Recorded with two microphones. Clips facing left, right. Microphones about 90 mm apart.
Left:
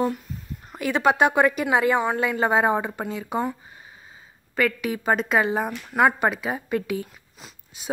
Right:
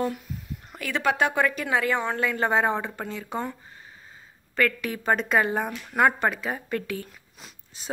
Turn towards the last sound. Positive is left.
turn(degrees=10)  # may be behind; listen again after turning